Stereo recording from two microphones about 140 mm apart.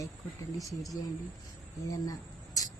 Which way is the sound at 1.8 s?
25° left (ahead or behind).